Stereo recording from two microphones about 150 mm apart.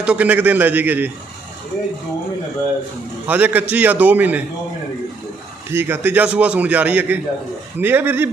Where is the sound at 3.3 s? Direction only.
10° right (ahead or behind).